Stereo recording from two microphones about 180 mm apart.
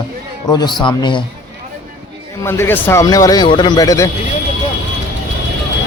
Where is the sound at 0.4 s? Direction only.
25° left (ahead or behind).